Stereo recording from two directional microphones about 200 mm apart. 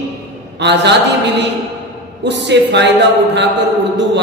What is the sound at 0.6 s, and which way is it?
Mantra, 60° right (ahead or behind).